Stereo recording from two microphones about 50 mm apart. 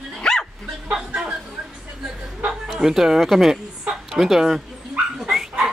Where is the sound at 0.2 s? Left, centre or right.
Centre.